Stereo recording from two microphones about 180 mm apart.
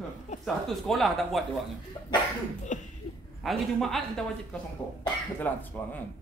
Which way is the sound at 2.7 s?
45° left (ahead or behind).